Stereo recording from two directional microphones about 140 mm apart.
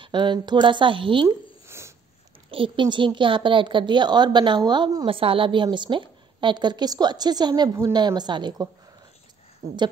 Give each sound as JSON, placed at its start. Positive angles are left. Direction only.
{"t": 0.0, "sound": "a woman's voice", "side_deg": -35}
{"t": 1.7, "sound": "a sound", "side_deg": -20}
{"t": 2.5, "sound": "a woman's voice", "side_deg": -35}